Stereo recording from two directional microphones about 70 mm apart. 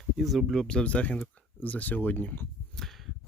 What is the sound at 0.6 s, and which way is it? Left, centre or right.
Speech, centre.